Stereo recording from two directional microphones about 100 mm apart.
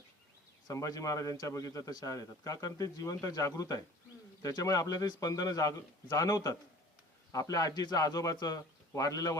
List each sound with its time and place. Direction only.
0.7 s a man's voice: 35° left (ahead or behind)